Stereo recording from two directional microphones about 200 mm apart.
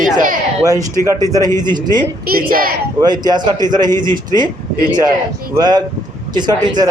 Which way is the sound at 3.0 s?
20° right (ahead or behind).